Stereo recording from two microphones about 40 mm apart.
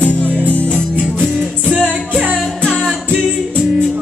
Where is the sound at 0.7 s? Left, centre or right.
Right.